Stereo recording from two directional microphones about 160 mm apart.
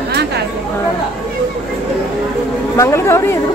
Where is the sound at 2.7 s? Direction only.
15° left (ahead or behind).